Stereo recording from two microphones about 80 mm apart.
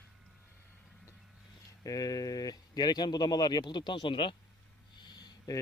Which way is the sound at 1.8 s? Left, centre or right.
Left.